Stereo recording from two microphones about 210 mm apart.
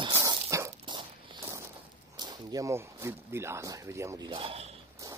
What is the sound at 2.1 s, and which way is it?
Speech, 20° right (ahead or behind).